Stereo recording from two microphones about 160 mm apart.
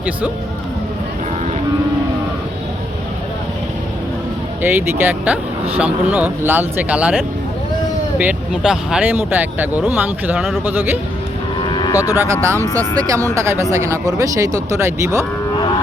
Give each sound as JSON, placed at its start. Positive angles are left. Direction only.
{"t": 4.6, "sound": "speech", "side_deg": -10}
{"t": 11.7, "sound": "cattle", "side_deg": 25}
{"t": 12.3, "sound": "speech", "side_deg": -20}